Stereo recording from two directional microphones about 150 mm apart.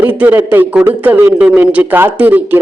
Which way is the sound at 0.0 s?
10° right (ahead or behind).